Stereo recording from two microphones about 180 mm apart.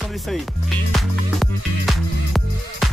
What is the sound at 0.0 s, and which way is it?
Speech, centre (ahead or behind).